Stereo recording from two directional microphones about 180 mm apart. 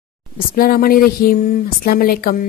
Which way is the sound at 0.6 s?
55° left (ahead or behind).